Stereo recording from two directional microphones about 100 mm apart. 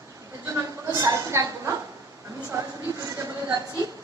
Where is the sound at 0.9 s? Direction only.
30° right (ahead or behind).